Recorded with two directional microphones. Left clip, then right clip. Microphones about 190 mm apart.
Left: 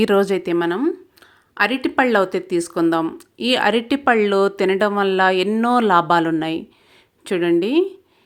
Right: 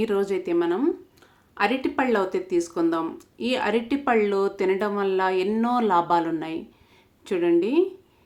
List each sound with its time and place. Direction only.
0.0 s speech: 50° left (ahead or behind)